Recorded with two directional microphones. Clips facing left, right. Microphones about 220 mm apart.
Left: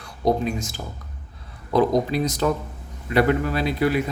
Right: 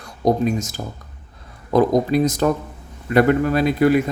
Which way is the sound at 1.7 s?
45° right (ahead or behind).